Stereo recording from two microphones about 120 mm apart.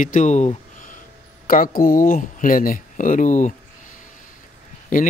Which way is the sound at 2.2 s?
90° left.